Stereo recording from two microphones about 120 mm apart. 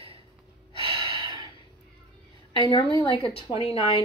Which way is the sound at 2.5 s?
40° left (ahead or behind).